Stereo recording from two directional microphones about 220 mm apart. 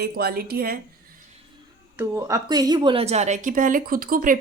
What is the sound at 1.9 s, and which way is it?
A woman's voice, 15° right (ahead or behind).